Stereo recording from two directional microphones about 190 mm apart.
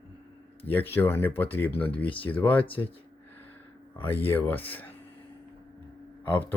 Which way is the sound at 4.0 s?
10° left (ahead or behind).